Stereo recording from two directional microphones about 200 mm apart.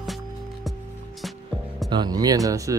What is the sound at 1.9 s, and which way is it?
Speech, 20° right (ahead or behind).